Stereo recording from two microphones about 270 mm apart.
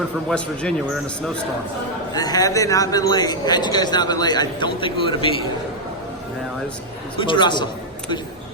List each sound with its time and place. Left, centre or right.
0.3 s a man's voice: centre
2.1 s a man's voice: centre
7.2 s a man's voice: centre